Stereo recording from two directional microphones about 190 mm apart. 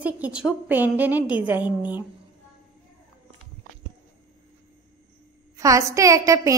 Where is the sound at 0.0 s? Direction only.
5° right (ahead or behind).